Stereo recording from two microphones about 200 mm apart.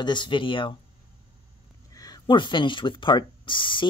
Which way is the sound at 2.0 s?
20° left (ahead or behind).